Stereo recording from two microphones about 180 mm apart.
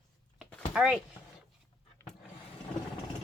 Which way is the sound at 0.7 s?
5° right (ahead or behind).